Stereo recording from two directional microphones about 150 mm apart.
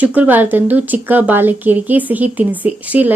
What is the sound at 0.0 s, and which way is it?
A woman's voice, 10° right (ahead or behind).